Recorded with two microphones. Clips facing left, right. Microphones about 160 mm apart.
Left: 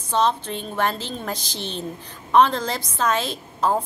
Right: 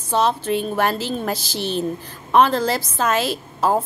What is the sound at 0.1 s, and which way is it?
A woman's voice, 10° right (ahead or behind).